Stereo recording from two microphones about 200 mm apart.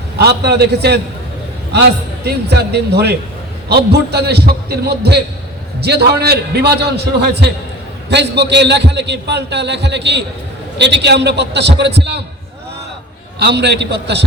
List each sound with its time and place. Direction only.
0.2 s a man's voice: 55° right (ahead or behind)
2.2 s a man's voice: 55° right (ahead or behind)
13.4 s a man's voice: 55° right (ahead or behind)